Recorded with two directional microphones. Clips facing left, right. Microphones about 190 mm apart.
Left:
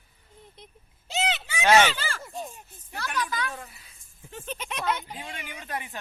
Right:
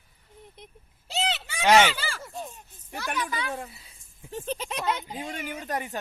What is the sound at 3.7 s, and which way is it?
Speech, 25° right (ahead or behind).